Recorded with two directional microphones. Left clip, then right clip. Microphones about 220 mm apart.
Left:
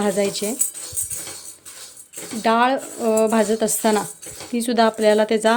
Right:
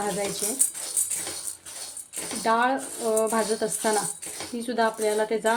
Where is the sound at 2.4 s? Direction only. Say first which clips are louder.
Left 5 dB; 40° left (ahead or behind).